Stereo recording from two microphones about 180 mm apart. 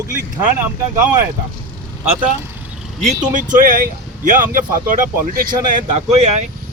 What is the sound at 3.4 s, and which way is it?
Speech, 45° right (ahead or behind).